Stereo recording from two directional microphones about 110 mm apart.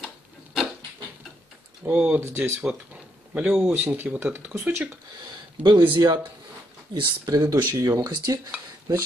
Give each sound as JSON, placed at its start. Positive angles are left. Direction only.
{"t": 1.9, "sound": "speech", "side_deg": -10}
{"t": 2.2, "sound": "speech", "side_deg": -20}
{"t": 5.6, "sound": "speech", "side_deg": -45}